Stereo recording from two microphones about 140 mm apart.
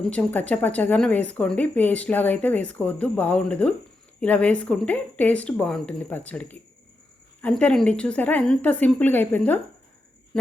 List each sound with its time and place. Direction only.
0.0 s speech: 10° left (ahead or behind)